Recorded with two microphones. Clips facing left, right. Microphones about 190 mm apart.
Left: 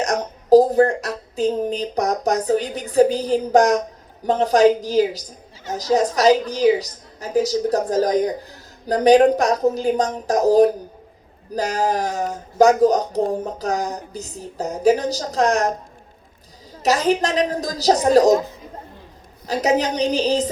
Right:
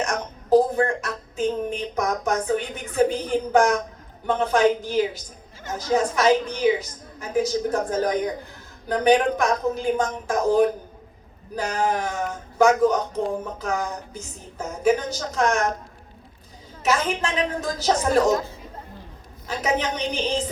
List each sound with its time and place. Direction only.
0.0 s a woman's voice: 35° left (ahead or behind)
16.8 s speech: 35° left (ahead or behind)
19.5 s speech: 40° left (ahead or behind)